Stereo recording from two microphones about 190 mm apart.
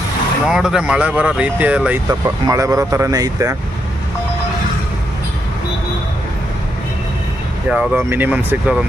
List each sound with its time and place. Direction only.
0.5 s speech: 5° right (ahead or behind)
2.0 s speech: 20° right (ahead or behind)
7.7 s speech: 10° right (ahead or behind)